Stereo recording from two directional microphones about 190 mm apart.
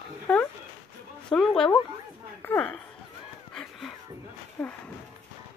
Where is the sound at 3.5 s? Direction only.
5° left (ahead or behind).